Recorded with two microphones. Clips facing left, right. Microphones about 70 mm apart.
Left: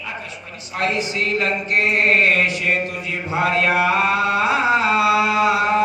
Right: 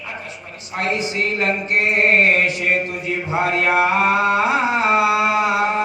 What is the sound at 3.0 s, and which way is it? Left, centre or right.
Mantra, right.